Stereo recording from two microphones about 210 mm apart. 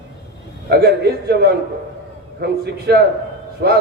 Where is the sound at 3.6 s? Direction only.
50° right (ahead or behind).